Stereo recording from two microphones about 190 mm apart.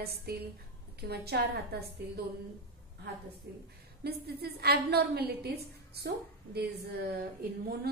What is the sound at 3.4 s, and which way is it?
A woman's voice, 60° right (ahead or behind).